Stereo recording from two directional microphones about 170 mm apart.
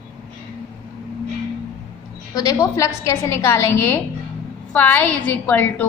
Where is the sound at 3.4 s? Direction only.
15° left (ahead or behind).